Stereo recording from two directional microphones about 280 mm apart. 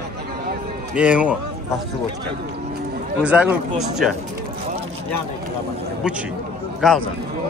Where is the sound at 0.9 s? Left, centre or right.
Centre.